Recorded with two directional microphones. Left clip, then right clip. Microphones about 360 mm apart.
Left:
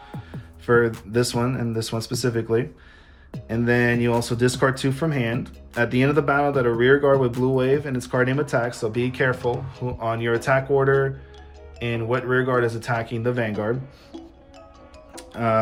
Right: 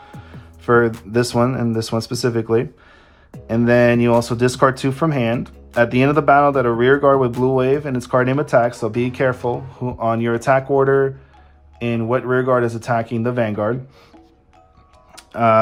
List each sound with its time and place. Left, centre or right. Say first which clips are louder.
0.0 s music: even; centre
1.1 s speech: right 5 dB; centre
15.1 s music: right 8 dB; centre